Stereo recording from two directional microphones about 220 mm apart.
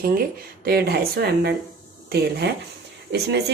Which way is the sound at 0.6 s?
45° right (ahead or behind).